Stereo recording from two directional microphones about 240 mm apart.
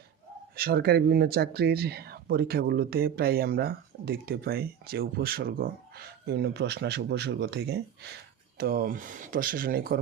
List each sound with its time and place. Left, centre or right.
0.5 s speech: right